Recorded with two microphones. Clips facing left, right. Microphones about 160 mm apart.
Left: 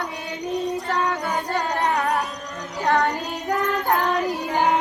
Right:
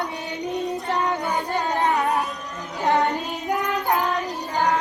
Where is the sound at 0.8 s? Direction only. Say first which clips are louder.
Even; 25° right (ahead or behind).